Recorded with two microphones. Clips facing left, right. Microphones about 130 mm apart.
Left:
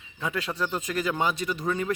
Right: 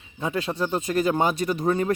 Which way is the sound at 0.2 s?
30° right (ahead or behind).